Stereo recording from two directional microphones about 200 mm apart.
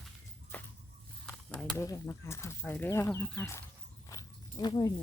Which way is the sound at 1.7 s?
15° left (ahead or behind).